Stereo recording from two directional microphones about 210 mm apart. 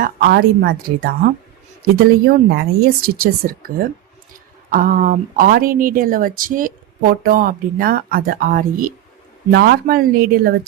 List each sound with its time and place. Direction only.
0.0 s a woman's voice: 45° right (ahead or behind)